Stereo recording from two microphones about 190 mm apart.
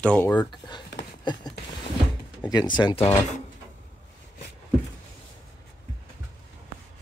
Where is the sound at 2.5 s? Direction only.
20° left (ahead or behind).